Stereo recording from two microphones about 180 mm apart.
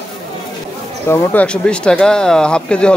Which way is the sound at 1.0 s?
15° left (ahead or behind).